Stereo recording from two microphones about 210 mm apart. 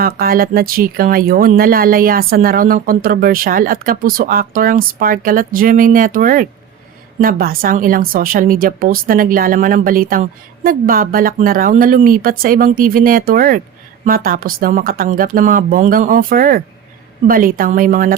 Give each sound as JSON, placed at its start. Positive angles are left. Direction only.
{"t": 0.0, "sound": "a woman's voice", "side_deg": -45}